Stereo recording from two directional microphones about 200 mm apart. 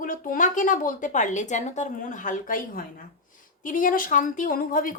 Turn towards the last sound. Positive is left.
turn(degrees=45)  # may be behind; listen again after turning